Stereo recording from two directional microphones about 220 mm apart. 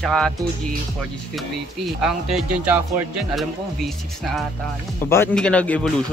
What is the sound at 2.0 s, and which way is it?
Speech, 5° right (ahead or behind).